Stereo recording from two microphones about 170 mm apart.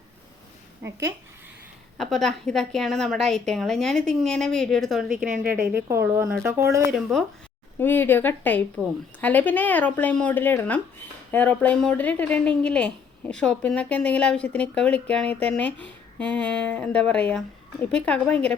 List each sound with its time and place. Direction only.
0.8 s speech: 15° right (ahead or behind)
2.0 s a woman's voice: 5° left (ahead or behind); by 6.8 s 20° right (ahead or behind)
6.9 s a woman's voice: 5° left (ahead or behind)